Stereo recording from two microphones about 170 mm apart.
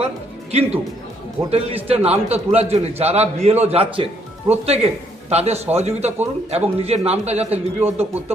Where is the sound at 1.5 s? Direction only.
35° right (ahead or behind).